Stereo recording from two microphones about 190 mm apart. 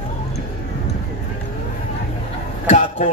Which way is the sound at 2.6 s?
40° left (ahead or behind).